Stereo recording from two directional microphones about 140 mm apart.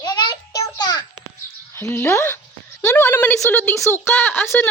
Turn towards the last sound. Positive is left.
turn(degrees=15)  # may be behind; listen again after turning